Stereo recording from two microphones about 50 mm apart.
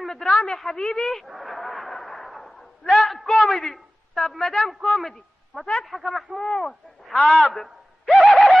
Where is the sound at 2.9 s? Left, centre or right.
Centre.